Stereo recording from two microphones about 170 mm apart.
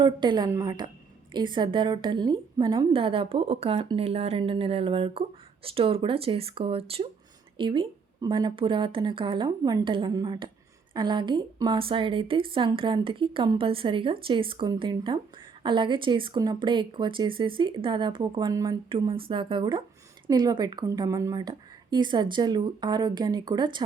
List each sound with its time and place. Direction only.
0.0 s a woman's voice: 25° right (ahead or behind)